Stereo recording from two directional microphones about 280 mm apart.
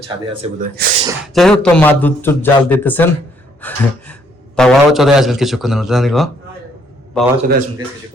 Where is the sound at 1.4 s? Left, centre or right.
Centre.